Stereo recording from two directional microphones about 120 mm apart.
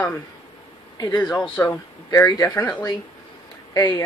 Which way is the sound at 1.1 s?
15° left (ahead or behind).